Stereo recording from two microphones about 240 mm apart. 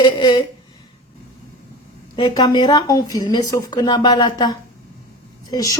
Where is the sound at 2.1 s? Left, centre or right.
Centre.